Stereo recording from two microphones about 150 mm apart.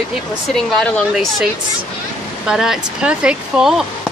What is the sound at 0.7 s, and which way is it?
Speech, 5° left (ahead or behind).